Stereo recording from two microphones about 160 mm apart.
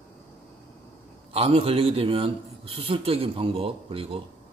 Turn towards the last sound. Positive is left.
turn(degrees=-35)  # may be behind; listen again after turning